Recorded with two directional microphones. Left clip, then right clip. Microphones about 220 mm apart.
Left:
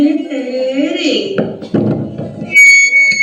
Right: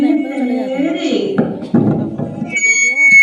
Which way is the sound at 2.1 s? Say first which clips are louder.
Left 9 dB; 20° left (ahead or behind).